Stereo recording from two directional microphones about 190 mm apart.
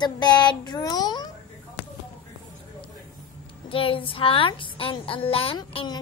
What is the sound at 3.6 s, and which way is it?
A woman's voice, 30° left (ahead or behind).